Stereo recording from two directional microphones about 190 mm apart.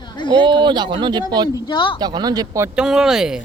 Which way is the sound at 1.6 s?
25° left (ahead or behind).